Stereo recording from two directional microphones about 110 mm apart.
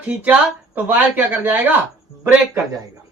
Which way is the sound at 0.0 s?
10° right (ahead or behind).